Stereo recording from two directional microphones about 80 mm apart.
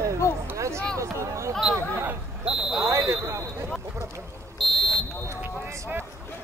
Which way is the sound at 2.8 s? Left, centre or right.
Right.